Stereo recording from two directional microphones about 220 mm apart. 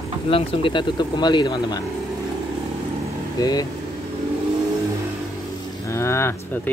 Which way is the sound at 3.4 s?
15° left (ahead or behind).